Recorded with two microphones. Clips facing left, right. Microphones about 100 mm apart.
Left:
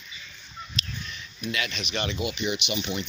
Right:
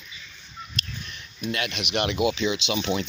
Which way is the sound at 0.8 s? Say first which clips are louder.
Even; 55° right (ahead or behind).